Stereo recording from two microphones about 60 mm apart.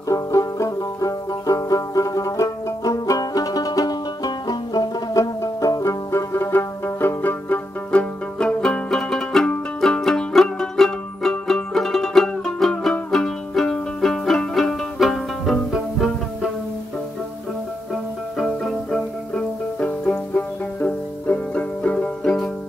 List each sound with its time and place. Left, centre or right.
0.1 s banjo: left
5.1 s music: left; by 16.5 s centre
18.4 s music: centre
20.1 s music: left